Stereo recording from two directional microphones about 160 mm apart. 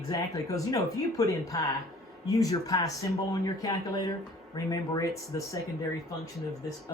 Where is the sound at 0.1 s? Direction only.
20° left (ahead or behind).